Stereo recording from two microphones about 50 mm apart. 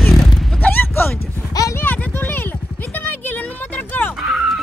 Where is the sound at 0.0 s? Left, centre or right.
Centre.